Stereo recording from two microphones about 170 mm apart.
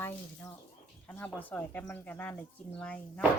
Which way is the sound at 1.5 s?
10° left (ahead or behind).